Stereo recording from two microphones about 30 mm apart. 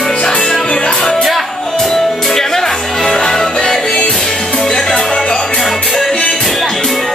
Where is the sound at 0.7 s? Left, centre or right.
Left.